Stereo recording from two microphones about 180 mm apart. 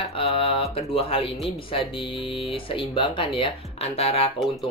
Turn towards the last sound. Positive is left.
turn(degrees=35)  # may be behind; listen again after turning